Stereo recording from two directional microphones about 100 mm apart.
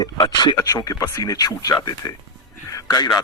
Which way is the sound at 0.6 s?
35° left (ahead or behind).